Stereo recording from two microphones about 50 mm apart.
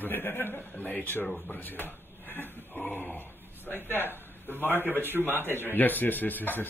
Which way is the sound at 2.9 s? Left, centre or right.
Left.